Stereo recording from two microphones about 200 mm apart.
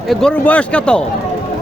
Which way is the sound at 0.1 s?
5° left (ahead or behind).